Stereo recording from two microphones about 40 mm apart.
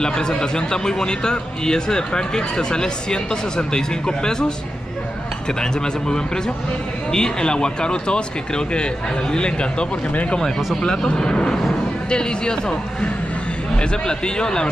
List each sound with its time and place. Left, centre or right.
0.0 s a man's voice: centre
5.6 s a man's voice: centre